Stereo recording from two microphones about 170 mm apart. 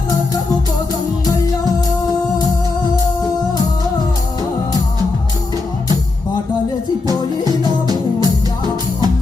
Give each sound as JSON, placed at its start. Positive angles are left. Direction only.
{"t": 7.1, "sound": "music", "side_deg": -25}